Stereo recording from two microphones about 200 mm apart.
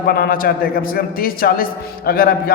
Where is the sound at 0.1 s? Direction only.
45° left (ahead or behind).